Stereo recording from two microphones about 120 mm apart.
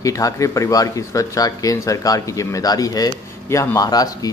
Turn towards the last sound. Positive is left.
turn(degrees=30)  # may be behind; listen again after turning